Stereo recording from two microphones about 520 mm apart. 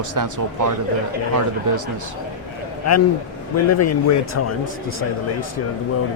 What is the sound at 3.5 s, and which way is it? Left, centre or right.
Speech, left.